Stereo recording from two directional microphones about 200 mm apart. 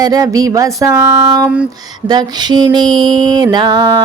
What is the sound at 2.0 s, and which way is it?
Music, 20° right (ahead or behind).